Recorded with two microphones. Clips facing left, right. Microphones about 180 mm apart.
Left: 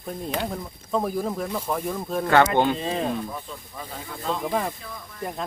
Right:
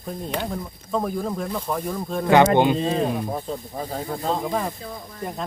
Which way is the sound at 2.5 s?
15° right (ahead or behind).